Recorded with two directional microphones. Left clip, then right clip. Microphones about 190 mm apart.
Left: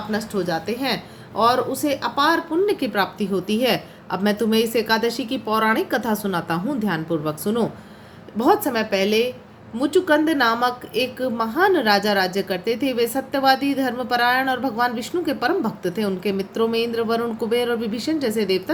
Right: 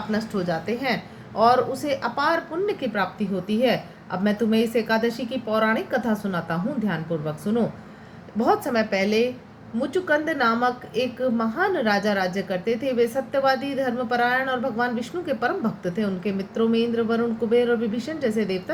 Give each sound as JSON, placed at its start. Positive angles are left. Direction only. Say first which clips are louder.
{"t": 0.1, "sound": "a woman's voice", "louder": "left 3 dB", "side_deg": 10}
{"t": 2.6, "sound": "a woman's voice", "louder": "left 4 dB", "side_deg": 30}
{"t": 8.4, "sound": "a woman's voice", "louder": "left 3 dB", "side_deg": 20}